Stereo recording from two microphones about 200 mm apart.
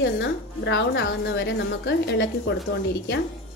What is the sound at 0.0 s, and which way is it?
A woman's voice, 65° left (ahead or behind).